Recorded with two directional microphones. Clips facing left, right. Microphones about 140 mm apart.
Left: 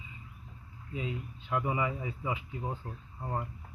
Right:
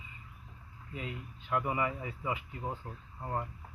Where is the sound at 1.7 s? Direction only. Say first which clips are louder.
Left 1 dB; 15° left (ahead or behind).